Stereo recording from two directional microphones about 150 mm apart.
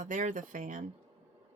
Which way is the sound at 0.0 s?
55° right (ahead or behind).